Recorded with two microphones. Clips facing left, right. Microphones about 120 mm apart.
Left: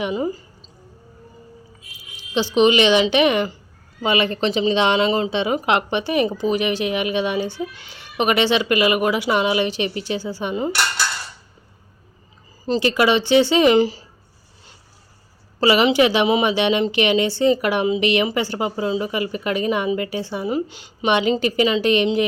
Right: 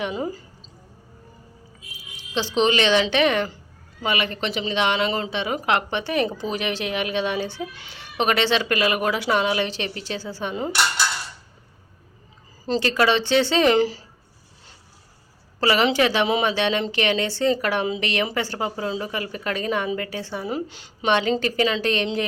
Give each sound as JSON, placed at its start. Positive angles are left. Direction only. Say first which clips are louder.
{"t": 0.0, "sound": "speech", "louder": "left 4 dB", "side_deg": 5}
{"t": 2.6, "sound": "a woman's voice", "louder": "left 4 dB", "side_deg": 15}
{"t": 4.0, "sound": "a woman's voice", "louder": "left 6 dB", "side_deg": 25}
{"t": 12.6, "sound": "a woman's voice", "louder": "left 3 dB", "side_deg": 10}
{"t": 15.6, "sound": "a woman's voice", "louder": "left 4 dB", "side_deg": 15}